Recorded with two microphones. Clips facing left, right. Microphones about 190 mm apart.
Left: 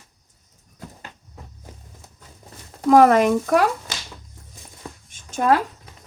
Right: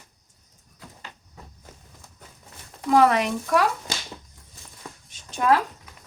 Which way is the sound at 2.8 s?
45° left (ahead or behind).